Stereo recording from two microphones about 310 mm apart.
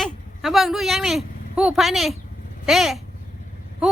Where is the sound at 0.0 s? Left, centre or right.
Centre.